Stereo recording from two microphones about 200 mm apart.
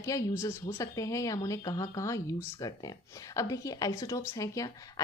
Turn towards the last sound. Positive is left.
turn(degrees=15)  # may be behind; listen again after turning